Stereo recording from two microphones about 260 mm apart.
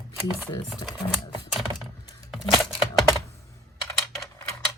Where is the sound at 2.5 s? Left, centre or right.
Centre.